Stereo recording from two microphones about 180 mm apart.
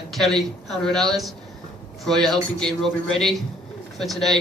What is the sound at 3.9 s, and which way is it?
Speech, centre (ahead or behind).